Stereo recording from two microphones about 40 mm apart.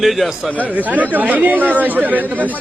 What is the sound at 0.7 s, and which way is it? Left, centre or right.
Speech, right.